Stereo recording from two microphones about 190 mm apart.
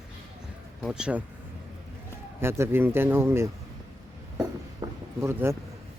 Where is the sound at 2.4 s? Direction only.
10° right (ahead or behind).